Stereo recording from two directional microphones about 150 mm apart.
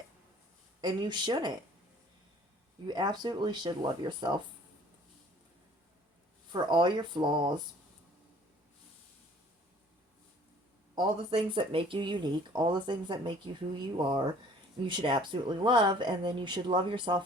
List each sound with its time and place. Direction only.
0.8 s speech: 30° right (ahead or behind)
2.8 s speech: 30° right (ahead or behind)
6.5 s speech: 30° right (ahead or behind)
10.9 s speech: 35° right (ahead or behind)